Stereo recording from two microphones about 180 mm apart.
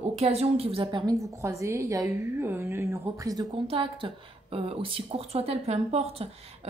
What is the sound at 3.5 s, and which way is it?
Speech, 30° right (ahead or behind).